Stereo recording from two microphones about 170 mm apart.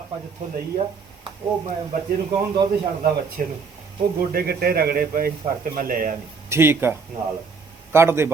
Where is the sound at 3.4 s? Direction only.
55° right (ahead or behind).